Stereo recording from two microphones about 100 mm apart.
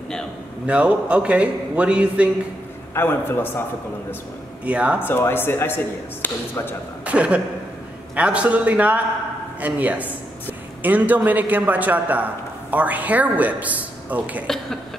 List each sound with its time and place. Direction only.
0.7 s a man's voice: 10° right (ahead or behind)
2.9 s a man's voice: 25° left (ahead or behind)
4.6 s a man's voice: 15° right (ahead or behind)
5.0 s a man's voice: 20° left (ahead or behind)
7.1 s a man's voice: 15° right (ahead or behind)